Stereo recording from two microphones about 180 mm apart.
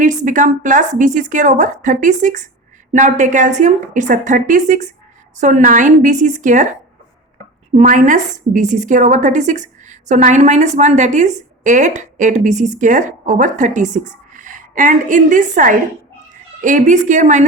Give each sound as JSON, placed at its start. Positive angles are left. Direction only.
{"t": 0.0, "sound": "a woman's voice", "side_deg": -45}
{"t": 7.7, "sound": "a woman's voice", "side_deg": -40}